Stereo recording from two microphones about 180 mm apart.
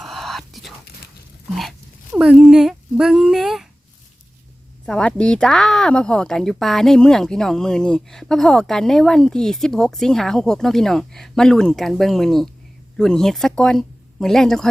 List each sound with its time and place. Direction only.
0.0 s whispering: centre (ahead or behind)
2.1 s speech: 5° right (ahead or behind)
4.9 s speech: 5° left (ahead or behind)